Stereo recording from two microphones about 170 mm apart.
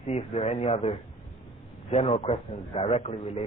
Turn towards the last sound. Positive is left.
turn(degrees=35)  # may be behind; listen again after turning